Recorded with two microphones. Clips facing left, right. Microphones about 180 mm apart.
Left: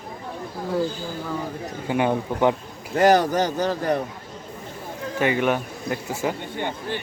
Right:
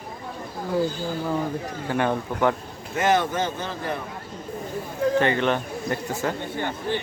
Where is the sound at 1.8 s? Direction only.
15° left (ahead or behind).